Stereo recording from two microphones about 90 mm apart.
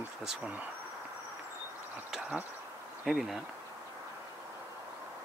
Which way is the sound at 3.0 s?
5° right (ahead or behind).